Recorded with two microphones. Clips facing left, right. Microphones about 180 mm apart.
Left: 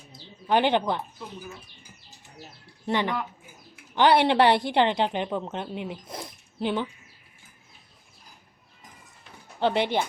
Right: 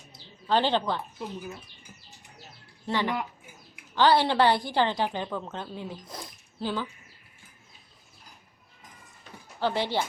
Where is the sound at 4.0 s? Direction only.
20° left (ahead or behind).